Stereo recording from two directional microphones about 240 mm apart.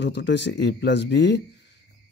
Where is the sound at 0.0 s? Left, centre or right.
Left.